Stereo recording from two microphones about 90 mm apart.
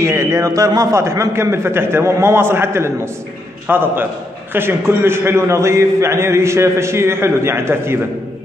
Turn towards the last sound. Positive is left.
turn(degrees=-25)  # may be behind; listen again after turning